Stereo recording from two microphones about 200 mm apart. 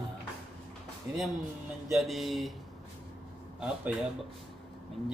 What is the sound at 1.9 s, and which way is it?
Speech, centre (ahead or behind).